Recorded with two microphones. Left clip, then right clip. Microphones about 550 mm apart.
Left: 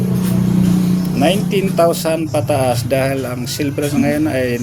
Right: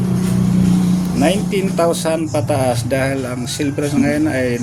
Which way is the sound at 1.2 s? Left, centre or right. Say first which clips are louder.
Left 2 dB; left.